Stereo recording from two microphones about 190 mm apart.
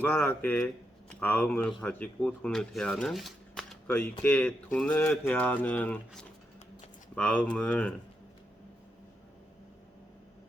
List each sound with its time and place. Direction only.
0.0 s speech: 10° left (ahead or behind)